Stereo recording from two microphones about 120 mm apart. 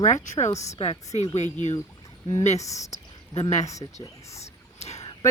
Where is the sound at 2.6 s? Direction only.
25° left (ahead or behind).